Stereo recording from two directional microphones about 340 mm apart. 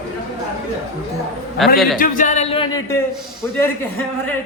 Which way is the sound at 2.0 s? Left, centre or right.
Left.